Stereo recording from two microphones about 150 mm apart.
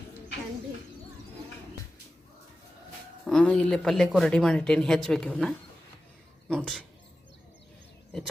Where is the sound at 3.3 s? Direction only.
5° left (ahead or behind).